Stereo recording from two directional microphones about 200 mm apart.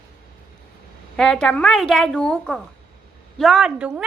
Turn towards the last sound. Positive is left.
turn(degrees=-5)  # may be behind; listen again after turning